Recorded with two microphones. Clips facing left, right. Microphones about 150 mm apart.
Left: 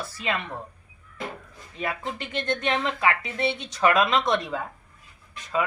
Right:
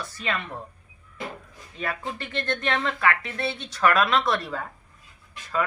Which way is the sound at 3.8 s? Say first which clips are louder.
Even; 20° left (ahead or behind).